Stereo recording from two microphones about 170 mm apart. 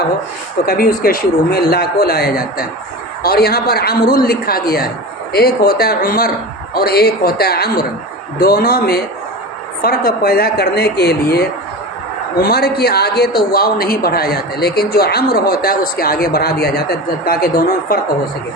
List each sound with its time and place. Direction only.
0.6 s a man's voice: 60° left (ahead or behind)